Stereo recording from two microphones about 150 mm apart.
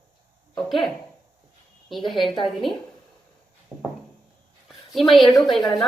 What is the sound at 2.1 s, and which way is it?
Speech, 35° left (ahead or behind).